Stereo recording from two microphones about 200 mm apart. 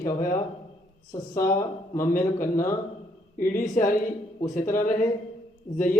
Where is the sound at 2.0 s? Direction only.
45° left (ahead or behind).